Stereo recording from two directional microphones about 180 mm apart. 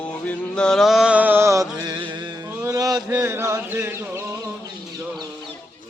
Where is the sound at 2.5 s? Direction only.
15° right (ahead or behind).